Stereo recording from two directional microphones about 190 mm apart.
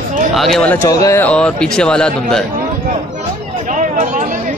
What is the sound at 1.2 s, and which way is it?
Speech, 5° left (ahead or behind).